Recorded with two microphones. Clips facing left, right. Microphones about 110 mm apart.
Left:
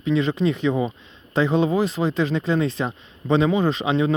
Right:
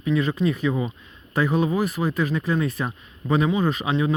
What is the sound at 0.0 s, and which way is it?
Speech, 25° left (ahead or behind).